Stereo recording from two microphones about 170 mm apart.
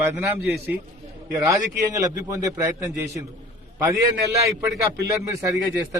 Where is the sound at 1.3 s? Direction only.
20° right (ahead or behind).